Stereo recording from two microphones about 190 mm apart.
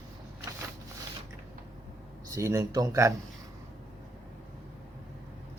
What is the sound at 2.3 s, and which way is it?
Speech, 15° right (ahead or behind).